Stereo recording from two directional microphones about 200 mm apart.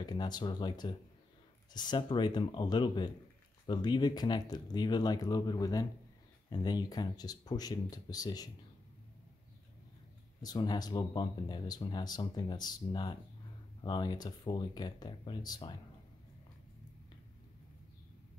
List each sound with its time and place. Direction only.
0.0 s speech: 20° left (ahead or behind)
10.4 s speech: 20° left (ahead or behind)